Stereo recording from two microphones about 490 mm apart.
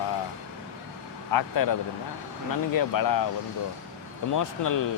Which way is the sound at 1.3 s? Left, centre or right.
Left.